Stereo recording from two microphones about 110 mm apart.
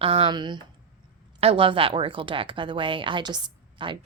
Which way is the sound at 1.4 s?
55° right (ahead or behind).